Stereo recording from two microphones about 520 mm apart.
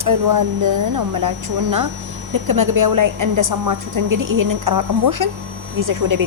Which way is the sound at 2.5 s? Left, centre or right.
Right.